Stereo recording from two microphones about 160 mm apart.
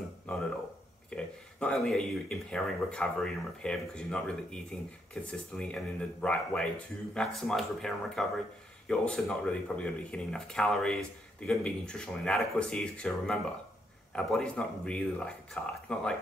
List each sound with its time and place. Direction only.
1.1 s speech: 5° left (ahead or behind)